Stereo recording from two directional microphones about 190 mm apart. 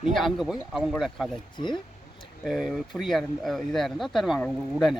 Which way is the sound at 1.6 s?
25° left (ahead or behind).